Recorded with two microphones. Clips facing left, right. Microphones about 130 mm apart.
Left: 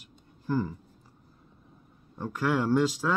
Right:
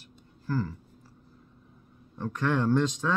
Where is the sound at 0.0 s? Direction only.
15° left (ahead or behind).